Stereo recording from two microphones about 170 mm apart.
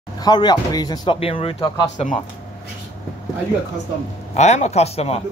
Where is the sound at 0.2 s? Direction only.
25° left (ahead or behind).